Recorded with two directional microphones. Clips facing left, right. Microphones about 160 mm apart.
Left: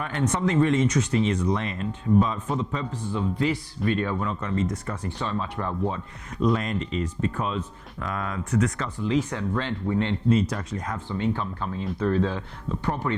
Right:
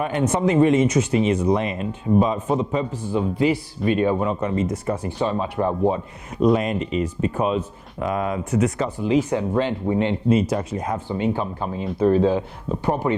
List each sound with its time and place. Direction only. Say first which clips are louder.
0.0 s speech: right 5 dB; 10° right (ahead or behind)